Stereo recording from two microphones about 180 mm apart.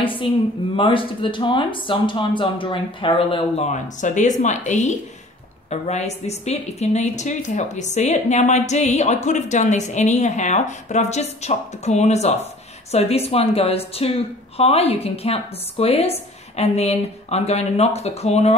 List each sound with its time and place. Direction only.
0.0 s a woman's voice: 30° left (ahead or behind)